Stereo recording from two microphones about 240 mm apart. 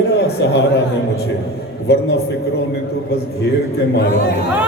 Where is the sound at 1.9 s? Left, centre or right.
Left.